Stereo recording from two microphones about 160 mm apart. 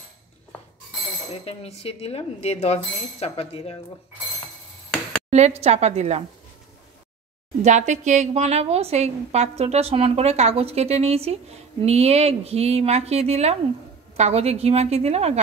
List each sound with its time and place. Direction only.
1.3 s speech: 40° left (ahead or behind)
5.6 s a woman's voice: 45° right (ahead or behind)
7.6 s a woman's voice: 50° right (ahead or behind)